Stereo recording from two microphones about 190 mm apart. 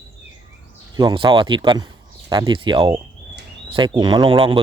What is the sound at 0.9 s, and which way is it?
Speech, 25° right (ahead or behind).